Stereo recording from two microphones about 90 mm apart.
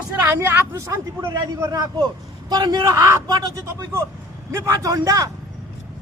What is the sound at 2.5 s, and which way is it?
Speech, 55° right (ahead or behind).